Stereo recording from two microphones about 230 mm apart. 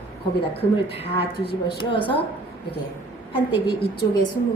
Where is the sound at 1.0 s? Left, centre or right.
Left.